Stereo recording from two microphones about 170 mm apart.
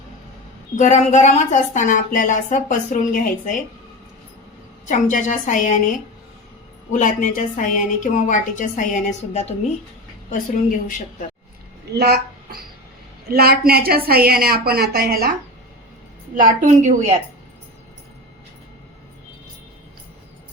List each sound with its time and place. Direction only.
0.8 s a woman's voice: 45° left (ahead or behind)
4.9 s a woman's voice: 50° left (ahead or behind)
6.9 s a woman's voice: 50° left (ahead or behind)
11.9 s a woman's voice: 70° right (ahead or behind)
16.3 s a woman's voice: 50° right (ahead or behind)